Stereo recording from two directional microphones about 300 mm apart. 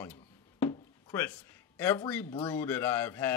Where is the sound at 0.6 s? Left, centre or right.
Centre.